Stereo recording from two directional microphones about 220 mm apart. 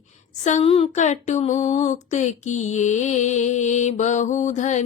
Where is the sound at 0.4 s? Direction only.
30° left (ahead or behind).